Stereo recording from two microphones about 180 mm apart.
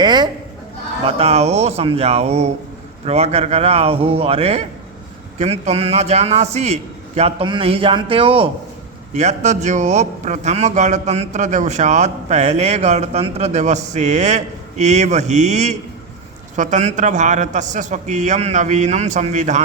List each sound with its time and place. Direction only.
0.0 s a man's voice: 25° right (ahead or behind)
1.0 s a man's voice: 35° right (ahead or behind)